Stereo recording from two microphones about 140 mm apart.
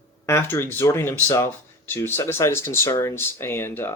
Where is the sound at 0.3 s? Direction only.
20° left (ahead or behind).